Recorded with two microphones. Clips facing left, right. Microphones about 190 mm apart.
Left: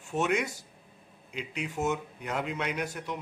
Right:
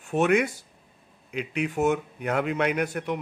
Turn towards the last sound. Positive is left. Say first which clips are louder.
# right 7 dB
turn(degrees=-60)  # may be behind; listen again after turning